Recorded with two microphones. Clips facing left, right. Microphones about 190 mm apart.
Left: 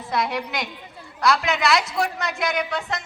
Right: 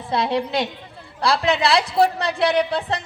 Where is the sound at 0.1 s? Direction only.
30° right (ahead or behind).